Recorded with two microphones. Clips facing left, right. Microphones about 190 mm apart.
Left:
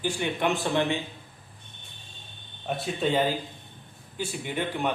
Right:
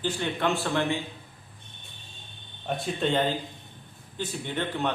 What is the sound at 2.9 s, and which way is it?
A man's voice, 5° left (ahead or behind).